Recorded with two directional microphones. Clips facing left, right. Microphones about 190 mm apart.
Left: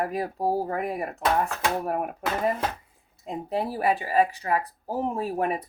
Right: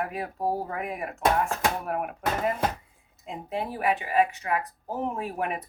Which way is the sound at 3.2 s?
35° left (ahead or behind).